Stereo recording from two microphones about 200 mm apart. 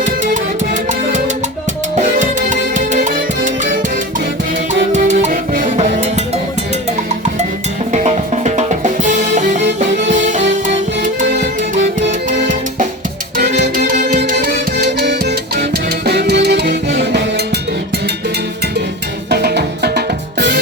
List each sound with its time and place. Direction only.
0.7 s music: 35° right (ahead or behind)
4.9 s music: 35° right (ahead or behind)
7.9 s music: 35° right (ahead or behind)
10.7 s music: 40° right (ahead or behind)
13.3 s music: 45° right (ahead or behind)
19.3 s music: 55° right (ahead or behind)